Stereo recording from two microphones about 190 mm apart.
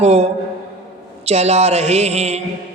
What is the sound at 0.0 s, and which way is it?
Speech, 35° right (ahead or behind).